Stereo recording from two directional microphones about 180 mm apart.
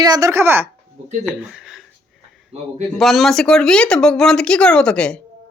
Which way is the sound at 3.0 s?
Centre (ahead or behind).